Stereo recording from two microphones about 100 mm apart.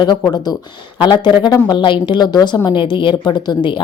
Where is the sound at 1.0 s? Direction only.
50° left (ahead or behind).